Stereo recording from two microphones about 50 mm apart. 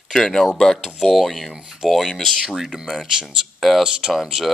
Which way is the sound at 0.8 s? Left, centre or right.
Centre.